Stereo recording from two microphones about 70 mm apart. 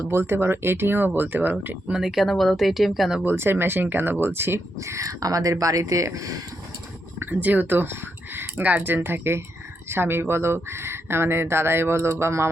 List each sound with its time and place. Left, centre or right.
0.0 s speech: right
1.9 s speech: centre
3.2 s speech: right
7.4 s speech: right